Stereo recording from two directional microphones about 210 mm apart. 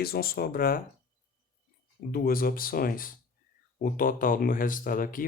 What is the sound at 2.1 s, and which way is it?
Speech, 45° left (ahead or behind).